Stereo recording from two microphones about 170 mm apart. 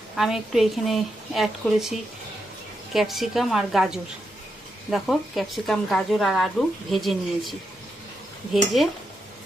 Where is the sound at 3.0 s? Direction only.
Centre (ahead or behind).